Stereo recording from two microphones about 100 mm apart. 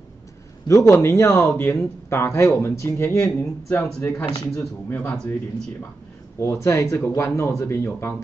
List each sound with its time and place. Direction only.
0.7 s speech: 30° left (ahead or behind)
3.9 s speech: 5° left (ahead or behind)
4.6 s speech: 20° left (ahead or behind)
6.4 s speech: 25° left (ahead or behind)